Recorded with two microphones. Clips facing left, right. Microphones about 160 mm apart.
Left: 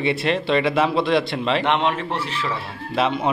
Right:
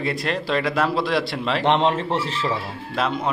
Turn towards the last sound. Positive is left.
turn(degrees=5)  # may be behind; listen again after turning